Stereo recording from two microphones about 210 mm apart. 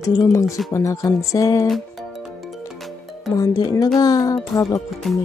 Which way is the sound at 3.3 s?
20° left (ahead or behind).